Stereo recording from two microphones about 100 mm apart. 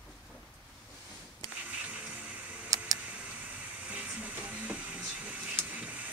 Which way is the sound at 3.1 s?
15° right (ahead or behind).